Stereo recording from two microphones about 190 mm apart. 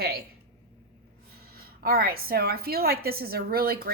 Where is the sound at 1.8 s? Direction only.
55° right (ahead or behind).